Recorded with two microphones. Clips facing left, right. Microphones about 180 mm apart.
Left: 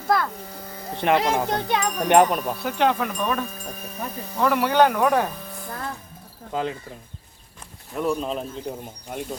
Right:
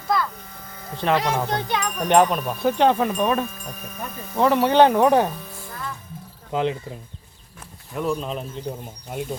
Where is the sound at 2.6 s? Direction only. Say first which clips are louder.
Right 6 dB; 20° right (ahead or behind).